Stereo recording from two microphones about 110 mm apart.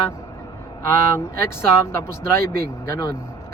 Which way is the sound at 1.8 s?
25° left (ahead or behind).